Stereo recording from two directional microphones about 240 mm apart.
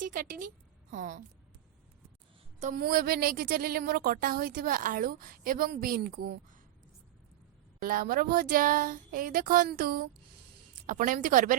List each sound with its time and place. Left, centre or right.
0.0 s a woman's voice: right
2.6 s a woman's voice: right
7.8 s a woman's voice: right